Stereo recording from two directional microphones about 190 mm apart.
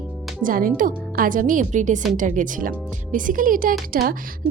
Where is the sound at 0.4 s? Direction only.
45° right (ahead or behind).